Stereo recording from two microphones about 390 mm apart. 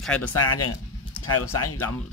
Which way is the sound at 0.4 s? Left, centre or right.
Left.